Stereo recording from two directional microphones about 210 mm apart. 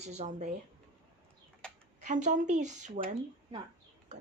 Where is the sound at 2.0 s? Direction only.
35° right (ahead or behind).